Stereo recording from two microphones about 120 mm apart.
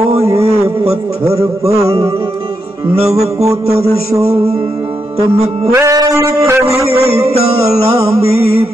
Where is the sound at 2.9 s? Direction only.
60° right (ahead or behind).